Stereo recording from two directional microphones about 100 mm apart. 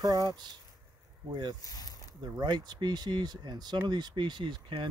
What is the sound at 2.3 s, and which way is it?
Speech, 45° right (ahead or behind).